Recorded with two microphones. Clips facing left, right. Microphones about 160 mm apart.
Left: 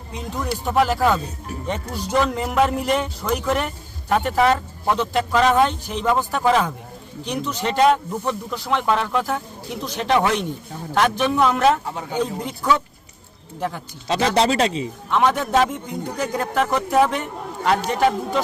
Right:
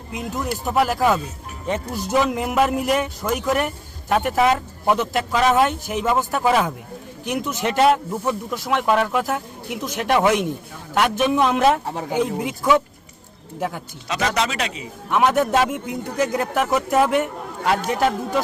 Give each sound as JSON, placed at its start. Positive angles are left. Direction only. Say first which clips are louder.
{"t": 0.1, "sound": "a man's voice", "louder": "right 1 dB", "side_deg": -5}
{"t": 11.9, "sound": "speech", "louder": "right 2 dB", "side_deg": -40}
{"t": 12.1, "sound": "speech", "louder": "right 2 dB", "side_deg": -10}
{"t": 14.1, "sound": "speech", "louder": "left 4 dB", "side_deg": 30}
{"t": 15.1, "sound": "a man's voice", "louder": "right 1 dB", "side_deg": -10}